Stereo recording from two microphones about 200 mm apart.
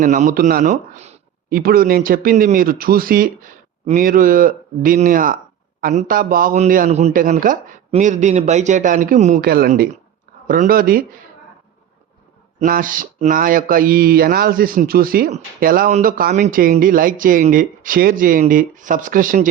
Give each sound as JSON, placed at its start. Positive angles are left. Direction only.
{"t": 0.0, "sound": "a man's voice", "side_deg": -40}
{"t": 1.5, "sound": "a man's voice", "side_deg": -45}
{"t": 12.5, "sound": "speech", "side_deg": -40}